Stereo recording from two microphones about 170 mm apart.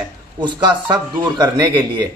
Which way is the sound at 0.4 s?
25° right (ahead or behind).